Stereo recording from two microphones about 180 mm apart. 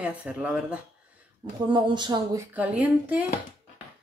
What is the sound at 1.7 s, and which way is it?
Speech, 25° right (ahead or behind).